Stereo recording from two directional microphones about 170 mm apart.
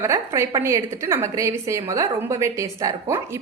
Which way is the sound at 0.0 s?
15° right (ahead or behind).